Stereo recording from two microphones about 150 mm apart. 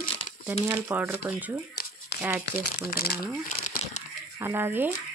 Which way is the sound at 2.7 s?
90° left.